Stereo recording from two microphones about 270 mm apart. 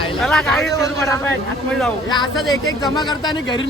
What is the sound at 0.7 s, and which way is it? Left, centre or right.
Speech, centre.